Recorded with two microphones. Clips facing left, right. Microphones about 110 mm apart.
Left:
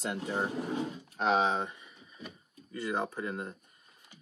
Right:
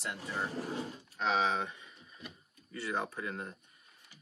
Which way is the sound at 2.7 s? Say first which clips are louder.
Left 3 dB; 25° left (ahead or behind).